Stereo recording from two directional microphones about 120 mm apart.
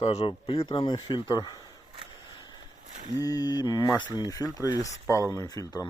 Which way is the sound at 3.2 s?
30° left (ahead or behind).